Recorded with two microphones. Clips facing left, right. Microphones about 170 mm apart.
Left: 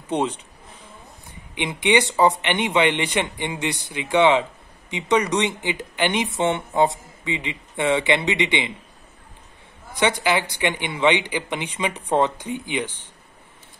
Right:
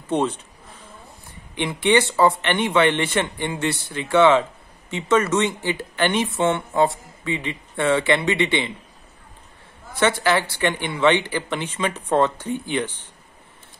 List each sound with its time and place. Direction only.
0.1 s a sound: 10° left (ahead or behind)
1.5 s speech: 15° left (ahead or behind)
9.9 s speech: 15° left (ahead or behind)